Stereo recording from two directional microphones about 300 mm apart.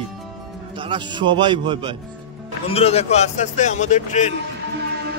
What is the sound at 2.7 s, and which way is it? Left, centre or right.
A man's voice, centre.